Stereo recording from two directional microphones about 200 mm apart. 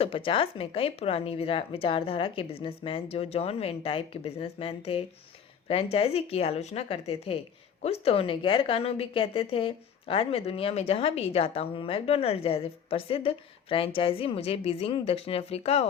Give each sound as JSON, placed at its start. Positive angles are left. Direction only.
{"t": 0.0, "sound": "a woman's voice", "side_deg": 25}